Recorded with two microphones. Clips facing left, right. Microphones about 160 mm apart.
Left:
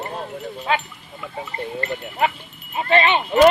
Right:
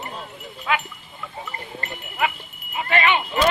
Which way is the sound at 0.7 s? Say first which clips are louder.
Left 1 dB; 30° left (ahead or behind).